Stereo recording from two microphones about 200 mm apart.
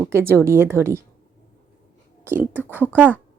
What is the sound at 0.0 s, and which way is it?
Speech, 10° right (ahead or behind).